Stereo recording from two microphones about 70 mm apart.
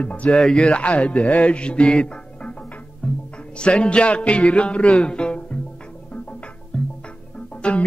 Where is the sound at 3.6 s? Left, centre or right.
Centre.